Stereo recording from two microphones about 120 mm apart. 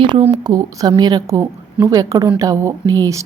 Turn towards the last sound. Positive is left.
turn(degrees=-25)  # may be behind; listen again after turning